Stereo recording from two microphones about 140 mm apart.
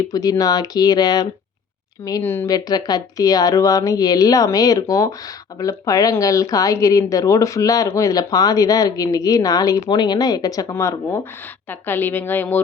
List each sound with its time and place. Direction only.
0.1 s speech: 25° left (ahead or behind)
2.2 s a woman's voice: 15° left (ahead or behind)
2.5 s a woman's voice: 30° left (ahead or behind); by 12.6 s 15° left (ahead or behind)